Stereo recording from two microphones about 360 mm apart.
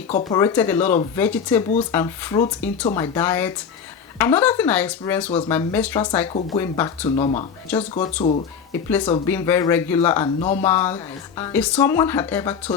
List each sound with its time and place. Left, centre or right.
0.1 s speech: centre